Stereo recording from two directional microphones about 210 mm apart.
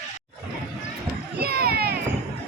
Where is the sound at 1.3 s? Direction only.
45° right (ahead or behind).